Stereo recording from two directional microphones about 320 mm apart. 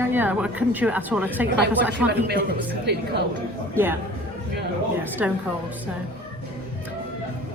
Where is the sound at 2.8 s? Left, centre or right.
Right.